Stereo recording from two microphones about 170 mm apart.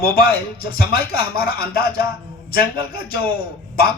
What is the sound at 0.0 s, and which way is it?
A man's voice, 60° left (ahead or behind).